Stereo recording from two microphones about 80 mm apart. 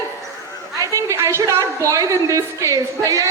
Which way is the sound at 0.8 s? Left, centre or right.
Right.